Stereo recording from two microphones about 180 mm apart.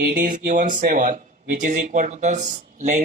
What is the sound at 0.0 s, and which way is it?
Speech, 50° right (ahead or behind).